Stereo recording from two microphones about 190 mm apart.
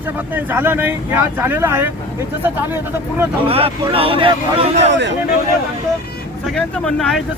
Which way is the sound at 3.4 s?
30° right (ahead or behind).